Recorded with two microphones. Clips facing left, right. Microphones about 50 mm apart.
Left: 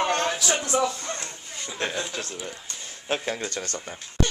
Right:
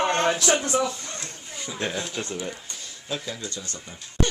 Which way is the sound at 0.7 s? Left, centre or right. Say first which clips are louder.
Left 1 dB; left.